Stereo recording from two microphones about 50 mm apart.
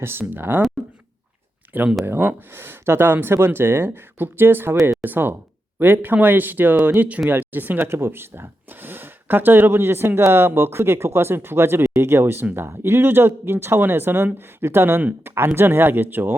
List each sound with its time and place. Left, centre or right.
0.0 s speech: right
1.6 s a sound: right
2.0 s speech: right
12.5 s speech: right